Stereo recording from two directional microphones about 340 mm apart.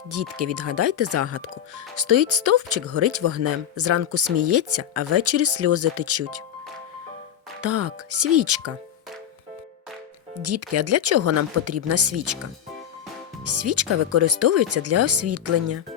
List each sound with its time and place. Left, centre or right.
0.1 s speech: right
7.6 s speech: right
10.3 s speech: right
13.4 s speech: right